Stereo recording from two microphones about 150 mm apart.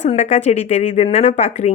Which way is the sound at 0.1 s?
45° left (ahead or behind).